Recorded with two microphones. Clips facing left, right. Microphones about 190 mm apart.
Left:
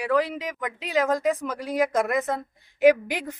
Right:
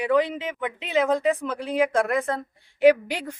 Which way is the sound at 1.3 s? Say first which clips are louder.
Right 1 dB; 10° left (ahead or behind).